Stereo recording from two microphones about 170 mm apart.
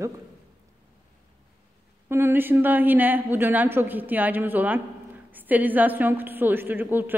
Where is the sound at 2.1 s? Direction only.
10° right (ahead or behind).